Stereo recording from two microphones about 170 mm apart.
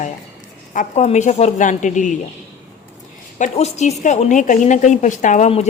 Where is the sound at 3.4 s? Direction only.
40° left (ahead or behind).